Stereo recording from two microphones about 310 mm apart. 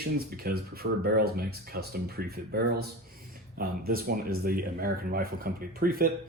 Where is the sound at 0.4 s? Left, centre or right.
Right.